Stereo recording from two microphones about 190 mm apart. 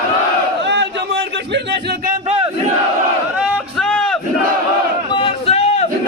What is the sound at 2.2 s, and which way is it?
Battle cry, 35° right (ahead or behind).